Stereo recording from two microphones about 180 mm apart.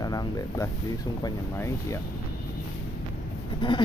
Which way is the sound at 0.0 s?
20° left (ahead or behind).